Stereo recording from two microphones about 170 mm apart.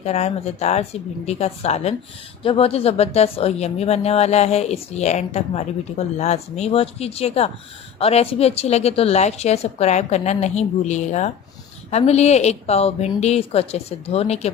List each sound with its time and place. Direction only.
0.0 s a woman's voice: 40° left (ahead or behind)